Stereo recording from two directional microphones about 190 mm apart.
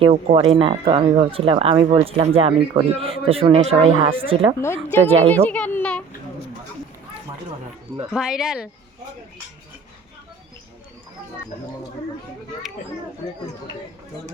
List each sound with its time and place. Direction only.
0.0 s speech: 30° right (ahead or behind)
4.6 s speech: 15° left (ahead or behind)
5.0 s speech: 30° right (ahead or behind)
5.5 s speech: 10° left (ahead or behind)
8.1 s speech: 5° right (ahead or behind)